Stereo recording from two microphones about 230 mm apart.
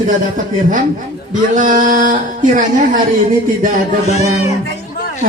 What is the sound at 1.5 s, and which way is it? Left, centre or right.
Speech, right.